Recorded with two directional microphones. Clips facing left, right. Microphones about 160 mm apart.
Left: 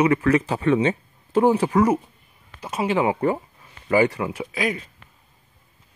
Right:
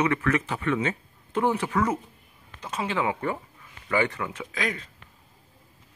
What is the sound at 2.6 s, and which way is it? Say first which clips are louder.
Speech: left 6 dB; 15° left (ahead or behind).